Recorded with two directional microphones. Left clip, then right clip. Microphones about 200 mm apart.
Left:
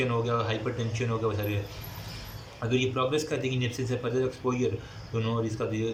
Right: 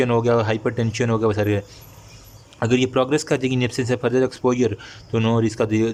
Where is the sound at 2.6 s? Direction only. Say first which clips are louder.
Right 8 dB; 50° right (ahead or behind).